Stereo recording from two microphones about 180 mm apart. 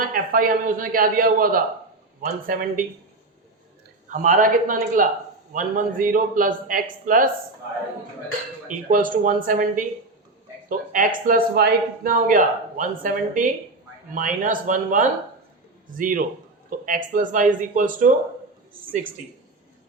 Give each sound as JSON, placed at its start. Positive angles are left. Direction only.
{"t": 0.0, "sound": "speech", "side_deg": -50}
{"t": 4.1, "sound": "speech", "side_deg": -45}
{"t": 8.6, "sound": "speech", "side_deg": -45}